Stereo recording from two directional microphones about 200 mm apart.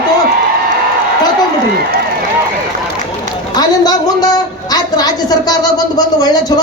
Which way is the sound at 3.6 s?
20° left (ahead or behind).